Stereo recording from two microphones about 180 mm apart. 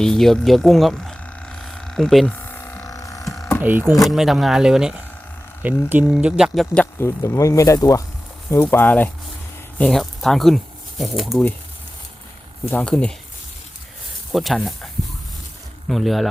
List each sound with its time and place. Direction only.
0.0 s a sound: centre (ahead or behind); by 3.2 s 20° left (ahead or behind)
3.6 s speech: 10° right (ahead or behind)
7.0 s speech: 15° left (ahead or behind); by 11.5 s centre (ahead or behind)
12.7 s speech: 5° left (ahead or behind)
14.3 s speech: centre (ahead or behind)
15.9 s speech: centre (ahead or behind)